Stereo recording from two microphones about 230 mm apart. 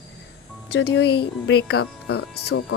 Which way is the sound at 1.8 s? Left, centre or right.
Left.